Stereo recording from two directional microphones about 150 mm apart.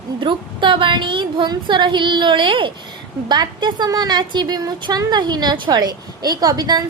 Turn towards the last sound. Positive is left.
turn(degrees=-25)  # may be behind; listen again after turning